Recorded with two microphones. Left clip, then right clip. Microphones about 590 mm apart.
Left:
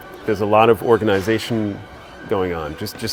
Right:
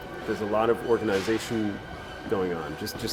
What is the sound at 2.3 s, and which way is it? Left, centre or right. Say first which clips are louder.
Speech: left 7 dB; left.